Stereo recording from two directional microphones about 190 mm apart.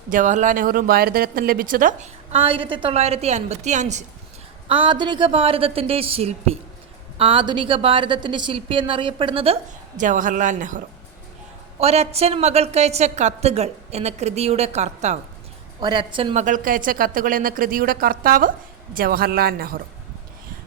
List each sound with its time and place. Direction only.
0.1 s a woman's voice: 40° right (ahead or behind)
4.7 s a woman's voice: 25° right (ahead or behind)
10.0 s a woman's voice: 45° right (ahead or behind)
15.8 s a woman's voice: 25° right (ahead or behind)
16.3 s speech: 40° right (ahead or behind)